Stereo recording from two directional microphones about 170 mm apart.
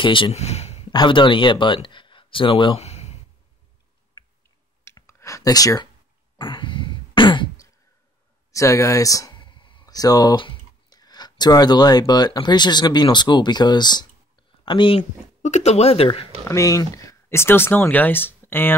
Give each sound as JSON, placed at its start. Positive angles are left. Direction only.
{"t": 0.0, "sound": "speech", "side_deg": 30}
{"t": 0.9, "sound": "speech", "side_deg": 30}
{"t": 4.8, "sound": "a sound", "side_deg": 15}
{"t": 6.3, "sound": "throat clearing", "side_deg": 30}
{"t": 8.5, "sound": "speech", "side_deg": 20}
{"t": 15.4, "sound": "speech", "side_deg": 40}
{"t": 16.4, "sound": "speech", "side_deg": 20}